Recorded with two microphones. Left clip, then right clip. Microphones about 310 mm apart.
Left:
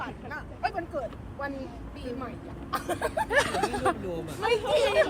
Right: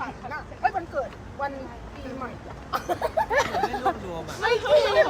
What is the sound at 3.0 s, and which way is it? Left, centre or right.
A woman's voice, left.